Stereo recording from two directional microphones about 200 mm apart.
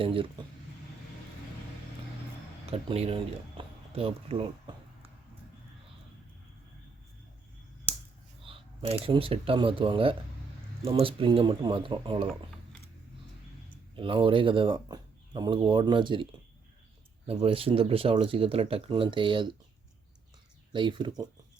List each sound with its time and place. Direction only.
0.0 s speech: 25° right (ahead or behind)
2.6 s speech: 30° right (ahead or behind)
3.6 s a sound: 25° right (ahead or behind)
3.9 s speech: 30° right (ahead or behind)
8.4 s speech: 25° right (ahead or behind)
13.9 s speech: 25° right (ahead or behind)
17.2 s speech: 30° right (ahead or behind)
20.7 s speech: 25° right (ahead or behind)